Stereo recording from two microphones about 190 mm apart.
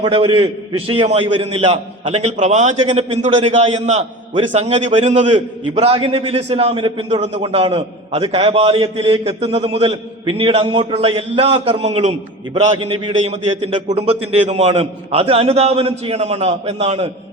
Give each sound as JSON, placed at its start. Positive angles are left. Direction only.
{"t": 0.0, "sound": "a man's voice", "side_deg": -30}